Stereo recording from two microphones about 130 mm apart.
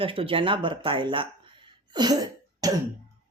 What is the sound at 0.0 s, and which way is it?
Speech, 45° right (ahead or behind).